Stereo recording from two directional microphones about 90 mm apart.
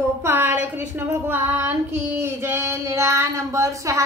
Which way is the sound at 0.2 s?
25° right (ahead or behind).